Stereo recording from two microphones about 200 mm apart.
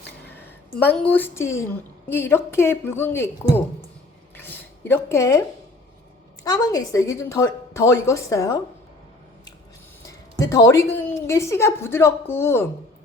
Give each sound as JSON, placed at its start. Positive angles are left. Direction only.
{"t": 0.3, "sound": "a woman's voice", "side_deg": 10}
{"t": 4.4, "sound": "a sound", "side_deg": 10}
{"t": 6.4, "sound": "a woman's voice", "side_deg": 20}
{"t": 10.1, "sound": "a woman's voice", "side_deg": 15}